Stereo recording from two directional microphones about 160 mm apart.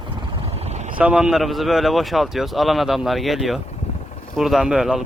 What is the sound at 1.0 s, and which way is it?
Speech, 5° right (ahead or behind).